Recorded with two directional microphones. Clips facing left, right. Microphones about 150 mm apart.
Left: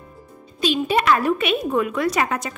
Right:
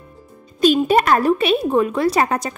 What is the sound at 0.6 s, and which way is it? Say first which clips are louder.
A woman's voice: right 6 dB; 45° right (ahead or behind).